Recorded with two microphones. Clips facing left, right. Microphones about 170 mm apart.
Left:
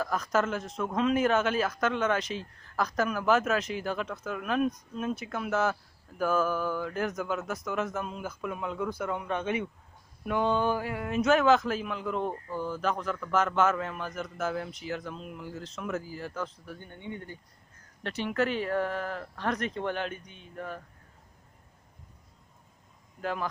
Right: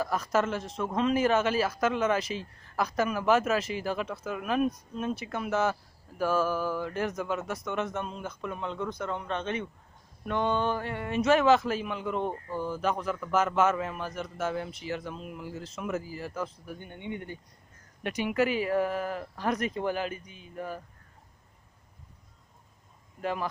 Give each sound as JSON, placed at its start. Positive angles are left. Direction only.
{"t": 0.0, "sound": "speech", "side_deg": -5}
{"t": 16.7, "sound": "speech", "side_deg": -15}